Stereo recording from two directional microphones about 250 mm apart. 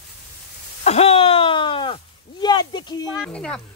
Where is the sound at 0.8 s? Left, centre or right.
Left.